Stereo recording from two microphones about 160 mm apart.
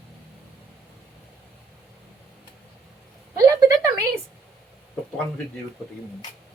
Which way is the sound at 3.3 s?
20° right (ahead or behind).